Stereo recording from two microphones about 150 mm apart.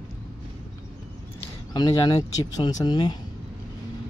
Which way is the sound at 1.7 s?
25° left (ahead or behind).